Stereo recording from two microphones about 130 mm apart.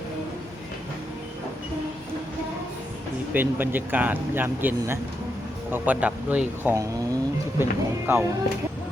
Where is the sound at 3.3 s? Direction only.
15° right (ahead or behind).